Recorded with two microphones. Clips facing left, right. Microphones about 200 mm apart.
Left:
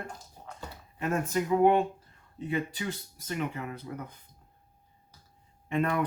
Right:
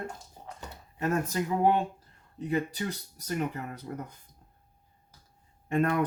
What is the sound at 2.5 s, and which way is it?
Speech, 40° right (ahead or behind).